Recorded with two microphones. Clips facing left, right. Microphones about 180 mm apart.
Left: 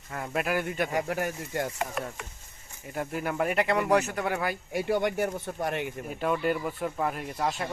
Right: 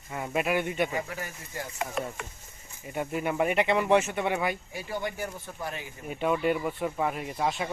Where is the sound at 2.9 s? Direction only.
Centre (ahead or behind).